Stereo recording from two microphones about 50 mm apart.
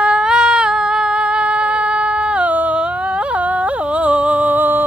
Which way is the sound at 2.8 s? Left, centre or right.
Right.